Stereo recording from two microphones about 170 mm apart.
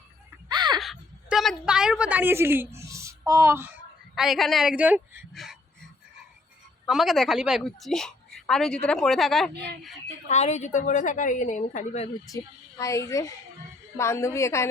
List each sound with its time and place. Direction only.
0.4 s a sound: 25° right (ahead or behind)
0.8 s a sound: centre (ahead or behind)
4.1 s a woman's voice: centre (ahead or behind)
6.8 s a woman's voice: centre (ahead or behind)
10.2 s a woman's voice: 40° left (ahead or behind)
12.3 s a woman's voice: 20° left (ahead or behind)